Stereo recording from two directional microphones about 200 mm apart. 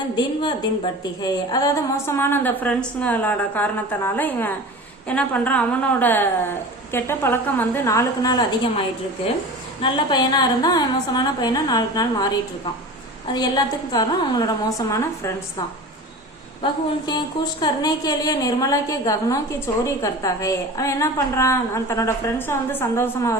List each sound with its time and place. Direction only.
1.2 s a woman's voice: 20° left (ahead or behind)
9.8 s a woman's voice: 20° left (ahead or behind)
17.1 s a woman's voice: 20° left (ahead or behind)